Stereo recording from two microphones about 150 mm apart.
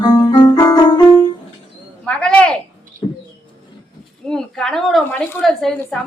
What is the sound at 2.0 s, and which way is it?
Speech, 5° left (ahead or behind).